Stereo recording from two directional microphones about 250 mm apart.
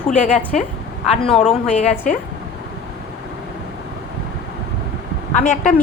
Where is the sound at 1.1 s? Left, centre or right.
Left.